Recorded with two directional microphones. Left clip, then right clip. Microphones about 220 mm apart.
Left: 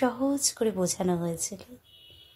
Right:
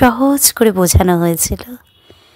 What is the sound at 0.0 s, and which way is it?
A woman's voice, 45° right (ahead or behind).